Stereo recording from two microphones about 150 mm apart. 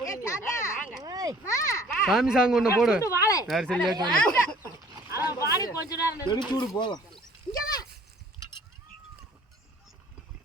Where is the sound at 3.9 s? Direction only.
30° right (ahead or behind).